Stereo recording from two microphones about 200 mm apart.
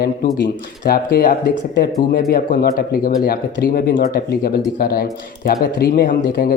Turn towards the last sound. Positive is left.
turn(degrees=50)  # may be behind; listen again after turning